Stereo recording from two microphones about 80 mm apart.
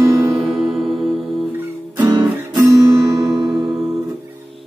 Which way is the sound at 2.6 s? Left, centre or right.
Right.